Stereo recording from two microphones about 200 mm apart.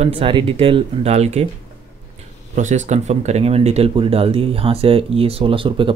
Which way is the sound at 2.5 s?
35° right (ahead or behind).